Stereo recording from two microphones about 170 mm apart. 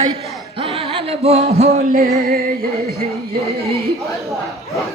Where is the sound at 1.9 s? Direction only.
50° right (ahead or behind).